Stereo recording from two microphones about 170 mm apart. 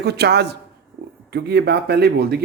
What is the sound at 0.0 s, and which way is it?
A man's voice, 70° right (ahead or behind).